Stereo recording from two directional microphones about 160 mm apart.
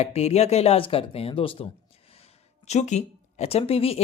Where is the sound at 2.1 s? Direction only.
40° left (ahead or behind).